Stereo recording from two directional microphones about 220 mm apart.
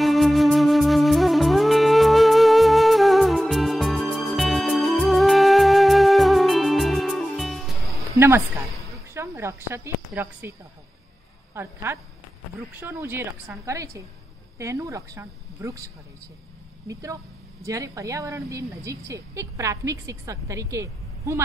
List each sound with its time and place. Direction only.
0.0 s music: centre (ahead or behind)
9.1 s a woman's voice: 10° right (ahead or behind)
11.5 s a woman's voice: 10° right (ahead or behind)